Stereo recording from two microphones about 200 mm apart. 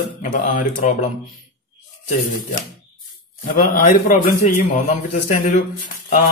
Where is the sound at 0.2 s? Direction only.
40° left (ahead or behind).